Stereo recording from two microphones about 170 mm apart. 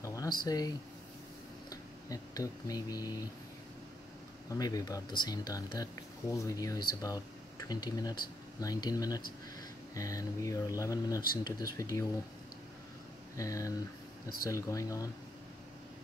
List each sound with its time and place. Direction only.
0.0 s speech: 20° left (ahead or behind)
4.5 s speech: 20° left (ahead or behind)
13.4 s speech: 20° left (ahead or behind)